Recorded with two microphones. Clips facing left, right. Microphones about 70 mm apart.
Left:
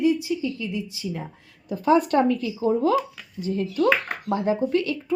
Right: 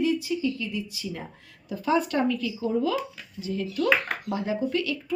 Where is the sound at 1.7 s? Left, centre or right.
Left.